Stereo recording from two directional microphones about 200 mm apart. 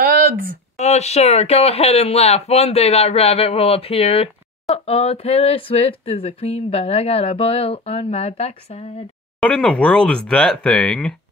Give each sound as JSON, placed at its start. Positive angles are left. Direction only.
{"t": 0.0, "sound": "a sound", "side_deg": -45}
{"t": 0.7, "sound": "speech", "side_deg": 35}
{"t": 9.4, "sound": "speech", "side_deg": 5}